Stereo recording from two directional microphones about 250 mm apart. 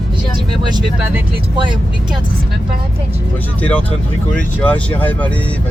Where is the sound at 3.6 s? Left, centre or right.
Centre.